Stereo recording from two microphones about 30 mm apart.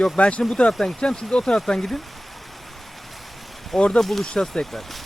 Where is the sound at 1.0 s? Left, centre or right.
Left.